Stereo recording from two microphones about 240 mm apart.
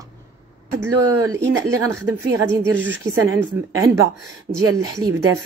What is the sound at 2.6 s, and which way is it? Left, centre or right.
Speech, centre.